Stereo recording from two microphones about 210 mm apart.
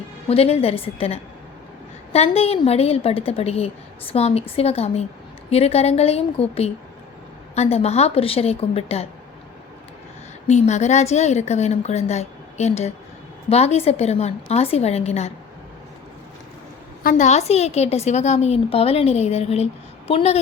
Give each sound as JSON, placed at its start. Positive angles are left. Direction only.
{"t": 0.3, "sound": "a woman's voice", "side_deg": 30}
{"t": 10.4, "sound": "a woman's voice", "side_deg": 35}
{"t": 17.0, "sound": "a woman's voice", "side_deg": 40}